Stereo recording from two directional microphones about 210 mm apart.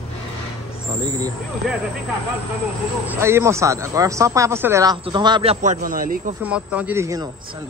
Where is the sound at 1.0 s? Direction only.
20° right (ahead or behind).